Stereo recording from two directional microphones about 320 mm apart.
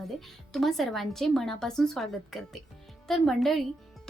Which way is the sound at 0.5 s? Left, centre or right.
Centre.